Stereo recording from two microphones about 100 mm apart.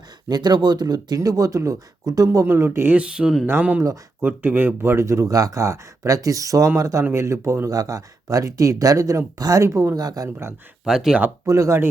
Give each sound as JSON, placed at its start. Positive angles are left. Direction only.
{"t": 0.3, "sound": "speech", "side_deg": -45}
{"t": 3.4, "sound": "speech", "side_deg": -20}
{"t": 10.2, "sound": "speech", "side_deg": -25}
{"t": 10.8, "sound": "speech", "side_deg": -5}
{"t": 11.4, "sound": "speech", "side_deg": -35}